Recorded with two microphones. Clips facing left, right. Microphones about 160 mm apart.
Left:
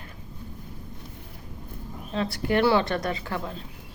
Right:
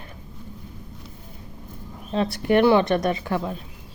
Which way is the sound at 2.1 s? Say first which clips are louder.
Right 5 dB; 20° right (ahead or behind).